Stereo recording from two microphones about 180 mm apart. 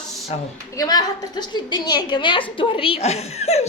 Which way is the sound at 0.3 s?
35° left (ahead or behind).